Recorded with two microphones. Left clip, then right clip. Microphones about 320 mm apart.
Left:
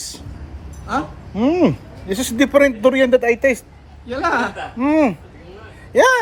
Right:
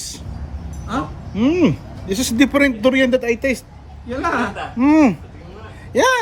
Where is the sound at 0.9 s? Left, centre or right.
Centre.